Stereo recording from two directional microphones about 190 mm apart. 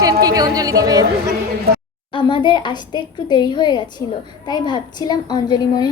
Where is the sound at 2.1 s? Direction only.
25° left (ahead or behind).